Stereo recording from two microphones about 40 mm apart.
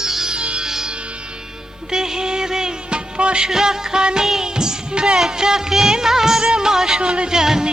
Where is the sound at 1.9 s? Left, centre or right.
Centre.